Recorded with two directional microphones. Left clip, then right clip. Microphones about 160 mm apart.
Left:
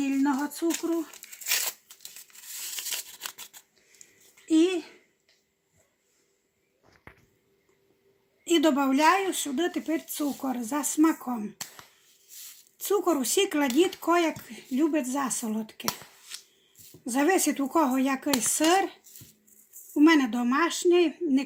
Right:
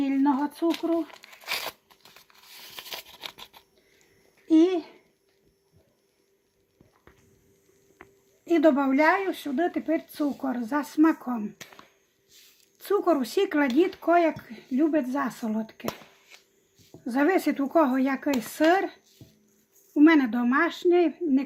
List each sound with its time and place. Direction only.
0.0 s a sound: 5° left (ahead or behind)
2.6 s a sound: 15° right (ahead or behind)
3.2 s scissors: 10° right (ahead or behind)
4.4 s speech: 10° left (ahead or behind)
8.4 s speech: 15° left (ahead or behind)
12.8 s speech: 5° left (ahead or behind)
17.1 s speech: 15° left (ahead or behind)